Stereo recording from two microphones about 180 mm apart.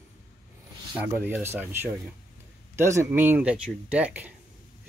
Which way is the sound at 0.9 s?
10° right (ahead or behind).